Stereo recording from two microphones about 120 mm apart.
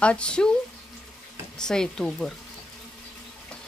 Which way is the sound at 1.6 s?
5° left (ahead or behind).